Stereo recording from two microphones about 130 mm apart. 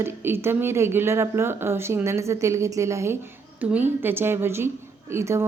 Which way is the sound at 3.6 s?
10° right (ahead or behind).